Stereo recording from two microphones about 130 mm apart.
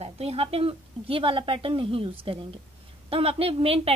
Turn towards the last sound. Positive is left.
turn(degrees=-50)  # may be behind; listen again after turning